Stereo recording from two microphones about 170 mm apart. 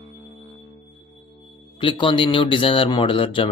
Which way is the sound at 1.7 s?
30° left (ahead or behind).